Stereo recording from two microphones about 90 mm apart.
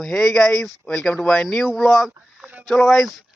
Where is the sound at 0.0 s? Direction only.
Centre (ahead or behind).